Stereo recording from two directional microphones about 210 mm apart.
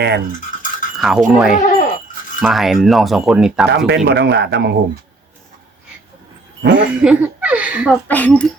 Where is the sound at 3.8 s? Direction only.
55° right (ahead or behind).